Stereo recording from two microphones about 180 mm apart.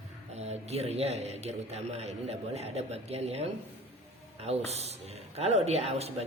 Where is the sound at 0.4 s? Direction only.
35° right (ahead or behind).